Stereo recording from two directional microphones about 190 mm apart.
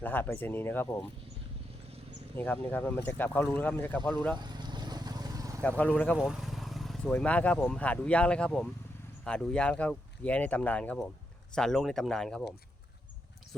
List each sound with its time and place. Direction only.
0.0 s speech: 10° left (ahead or behind)
2.3 s speech: 10° left (ahead or behind)
4.4 s vehicle: 20° right (ahead or behind)
5.6 s speech: 10° left (ahead or behind)
6.1 s speech: 5° right (ahead or behind)